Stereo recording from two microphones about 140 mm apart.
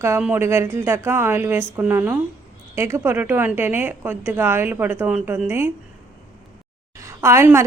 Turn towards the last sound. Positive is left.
turn(degrees=-20)  # may be behind; listen again after turning